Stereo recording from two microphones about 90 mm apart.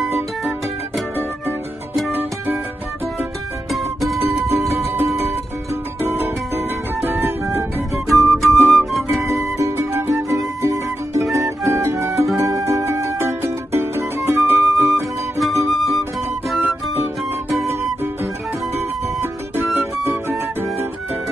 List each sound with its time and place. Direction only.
0.0 s music: 5° right (ahead or behind)
2.1 s music: 20° right (ahead or behind)
4.2 s music: 30° right (ahead or behind)
5.9 s music: 25° right (ahead or behind)
8.1 s music: centre (ahead or behind)
9.1 s music: 35° right (ahead or behind)
14.7 s music: centre (ahead or behind)
17.6 s music: 25° right (ahead or behind)
19.5 s music: 25° right (ahead or behind)